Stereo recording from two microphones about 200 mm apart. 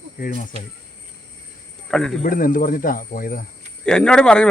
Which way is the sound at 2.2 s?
45° left (ahead or behind).